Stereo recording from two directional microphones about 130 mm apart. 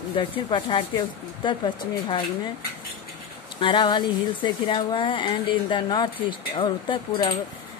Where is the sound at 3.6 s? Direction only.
35° left (ahead or behind).